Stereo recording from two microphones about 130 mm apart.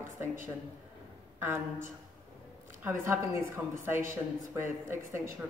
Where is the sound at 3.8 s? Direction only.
20° right (ahead or behind).